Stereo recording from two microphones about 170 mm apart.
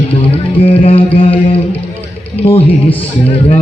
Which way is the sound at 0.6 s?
30° left (ahead or behind).